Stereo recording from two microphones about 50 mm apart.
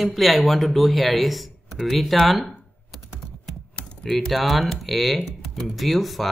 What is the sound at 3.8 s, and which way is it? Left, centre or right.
Typing, centre.